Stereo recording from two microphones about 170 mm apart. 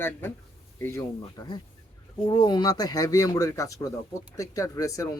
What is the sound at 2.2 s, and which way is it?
Speech, 25° left (ahead or behind).